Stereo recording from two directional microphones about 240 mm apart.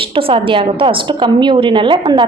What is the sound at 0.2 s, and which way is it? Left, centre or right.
A woman's voice, right.